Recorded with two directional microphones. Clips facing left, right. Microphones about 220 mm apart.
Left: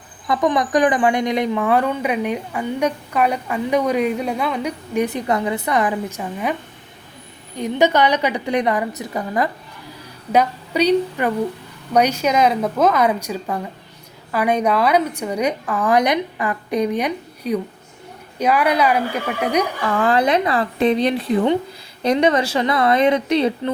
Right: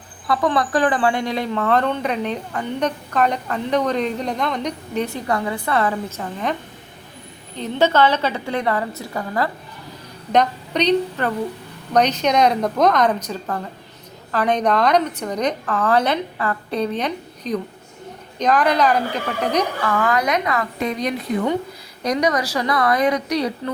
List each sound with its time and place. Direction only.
0.3 s a woman's voice: 20° left (ahead or behind)
5.0 s a woman's voice: 20° left (ahead or behind)
10.3 s a woman's voice: 5° left (ahead or behind)
20.0 s speech: 30° left (ahead or behind)